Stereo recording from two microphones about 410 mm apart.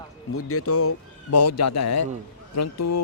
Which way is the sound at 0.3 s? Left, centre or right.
Left.